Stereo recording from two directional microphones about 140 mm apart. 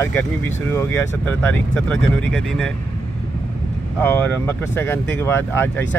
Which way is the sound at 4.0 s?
10° left (ahead or behind).